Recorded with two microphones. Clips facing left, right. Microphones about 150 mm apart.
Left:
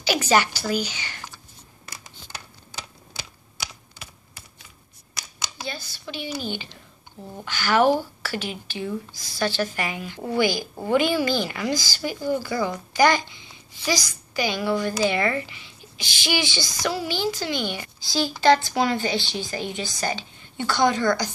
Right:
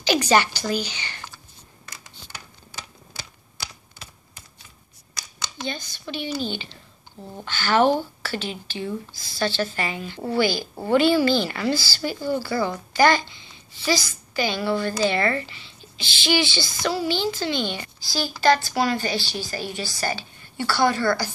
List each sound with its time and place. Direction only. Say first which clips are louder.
0.3 s a child's voice: left 2 dB; 10° left (ahead or behind)
5.6 s a child's voice: right 4 dB; 10° left (ahead or behind)